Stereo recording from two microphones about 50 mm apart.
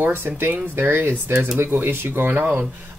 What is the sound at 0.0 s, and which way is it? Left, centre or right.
Speech, right.